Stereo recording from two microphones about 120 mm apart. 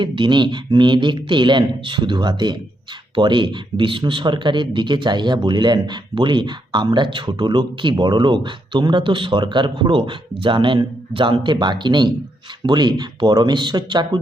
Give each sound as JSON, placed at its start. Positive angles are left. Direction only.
{"t": 0.0, "sound": "speech", "side_deg": -40}